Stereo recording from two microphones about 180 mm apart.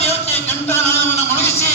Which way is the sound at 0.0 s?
35° left (ahead or behind).